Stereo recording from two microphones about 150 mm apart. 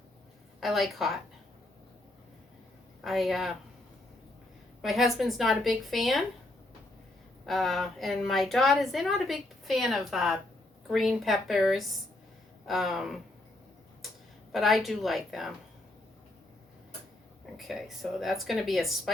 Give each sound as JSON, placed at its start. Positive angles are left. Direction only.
{"t": 0.6, "sound": "a woman's voice", "side_deg": 0}
{"t": 3.0, "sound": "a woman's voice", "side_deg": 0}
{"t": 4.8, "sound": "a woman's voice", "side_deg": 0}
{"t": 7.4, "sound": "a woman's voice", "side_deg": 0}
{"t": 14.5, "sound": "a woman's voice", "side_deg": 0}
{"t": 17.6, "sound": "a woman's voice", "side_deg": 0}